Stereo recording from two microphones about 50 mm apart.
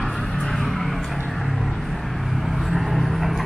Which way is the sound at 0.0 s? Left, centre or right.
Centre.